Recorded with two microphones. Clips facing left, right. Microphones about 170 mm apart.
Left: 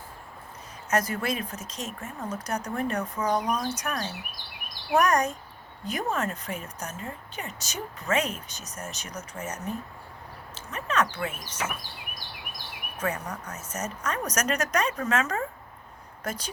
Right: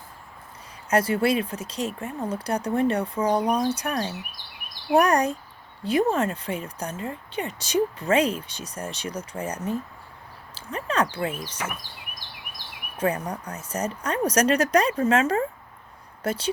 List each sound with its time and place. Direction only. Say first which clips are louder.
0.9 s speech: right 6 dB; 30° right (ahead or behind)
13.0 s speech: right 6 dB; 30° right (ahead or behind)